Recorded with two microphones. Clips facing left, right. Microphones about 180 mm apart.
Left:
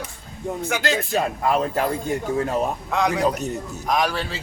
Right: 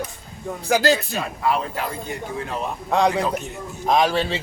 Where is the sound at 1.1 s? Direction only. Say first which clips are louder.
Left 2 dB; 45° left (ahead or behind).